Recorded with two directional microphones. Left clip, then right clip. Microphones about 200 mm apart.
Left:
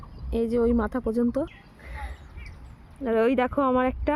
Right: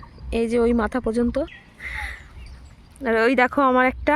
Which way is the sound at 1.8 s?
5° right (ahead or behind).